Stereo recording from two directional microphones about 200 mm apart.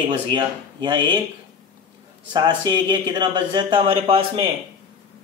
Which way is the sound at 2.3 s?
20° right (ahead or behind).